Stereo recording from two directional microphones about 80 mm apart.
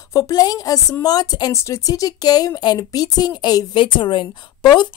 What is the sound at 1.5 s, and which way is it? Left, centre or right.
A woman's voice, left.